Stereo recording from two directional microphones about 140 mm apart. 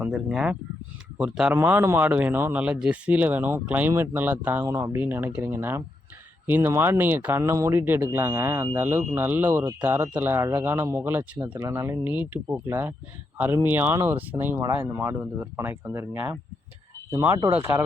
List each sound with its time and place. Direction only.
0.0 s speech: 5° right (ahead or behind)